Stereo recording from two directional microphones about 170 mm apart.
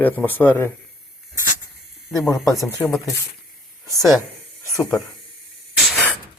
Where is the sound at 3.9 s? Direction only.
20° left (ahead or behind).